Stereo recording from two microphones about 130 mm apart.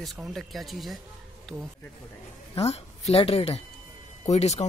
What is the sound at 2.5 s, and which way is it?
A woman's voice, 55° left (ahead or behind).